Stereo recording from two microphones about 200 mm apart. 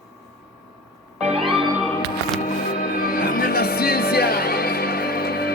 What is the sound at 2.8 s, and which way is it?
Music, 45° left (ahead or behind).